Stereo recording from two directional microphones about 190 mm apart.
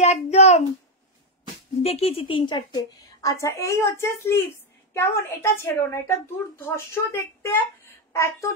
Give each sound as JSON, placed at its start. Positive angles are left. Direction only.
{"t": 0.0, "sound": "a child's voice", "side_deg": 35}
{"t": 1.8, "sound": "a woman's voice", "side_deg": 30}